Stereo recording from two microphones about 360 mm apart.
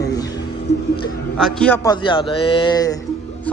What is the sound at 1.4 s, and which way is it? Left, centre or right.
A man's voice, centre.